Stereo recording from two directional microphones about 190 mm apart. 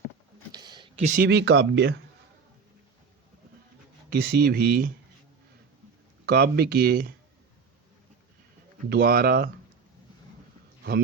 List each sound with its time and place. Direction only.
0.5 s a sound: 20° right (ahead or behind)
1.0 s speech: 45° right (ahead or behind)
1.3 s speech: 60° right (ahead or behind)
4.1 s speech: 55° right (ahead or behind)
6.2 s speech: 55° right (ahead or behind)
8.9 s speech: 55° right (ahead or behind)